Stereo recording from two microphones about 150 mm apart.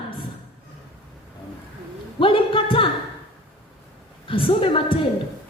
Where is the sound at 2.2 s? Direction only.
35° left (ahead or behind).